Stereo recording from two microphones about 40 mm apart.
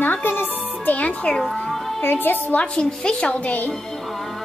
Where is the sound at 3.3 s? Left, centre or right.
Left.